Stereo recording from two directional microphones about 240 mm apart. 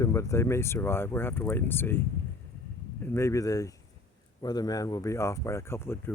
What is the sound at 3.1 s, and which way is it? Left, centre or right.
Speech, centre.